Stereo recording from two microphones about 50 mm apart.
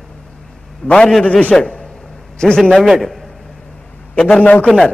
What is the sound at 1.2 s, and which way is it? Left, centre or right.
Speech, left.